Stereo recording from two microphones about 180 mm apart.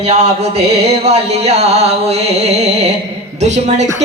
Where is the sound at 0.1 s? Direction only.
40° right (ahead or behind).